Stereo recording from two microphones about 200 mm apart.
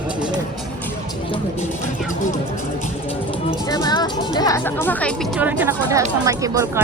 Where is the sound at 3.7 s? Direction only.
20° left (ahead or behind).